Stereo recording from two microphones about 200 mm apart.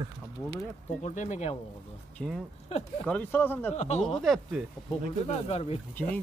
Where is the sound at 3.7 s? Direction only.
35° left (ahead or behind).